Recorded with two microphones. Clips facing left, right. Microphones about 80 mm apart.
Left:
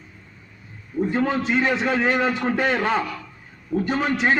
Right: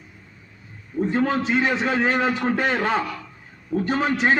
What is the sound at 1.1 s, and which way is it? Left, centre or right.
A man's voice, right.